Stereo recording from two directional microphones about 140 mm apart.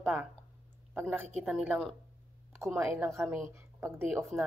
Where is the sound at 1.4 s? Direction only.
10° right (ahead or behind).